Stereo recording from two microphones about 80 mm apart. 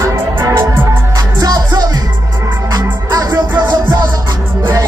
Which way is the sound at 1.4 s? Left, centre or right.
Right.